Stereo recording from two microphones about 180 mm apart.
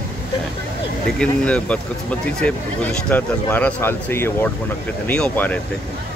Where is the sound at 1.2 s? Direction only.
5° left (ahead or behind).